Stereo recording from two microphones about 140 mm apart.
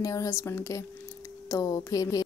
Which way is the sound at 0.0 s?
25° left (ahead or behind).